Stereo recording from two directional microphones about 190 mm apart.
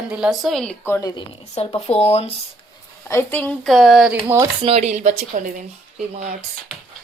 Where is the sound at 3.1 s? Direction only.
10° left (ahead or behind); by 4.4 s 10° right (ahead or behind).